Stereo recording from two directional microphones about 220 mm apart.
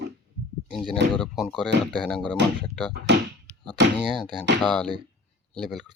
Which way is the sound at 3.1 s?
50° right (ahead or behind).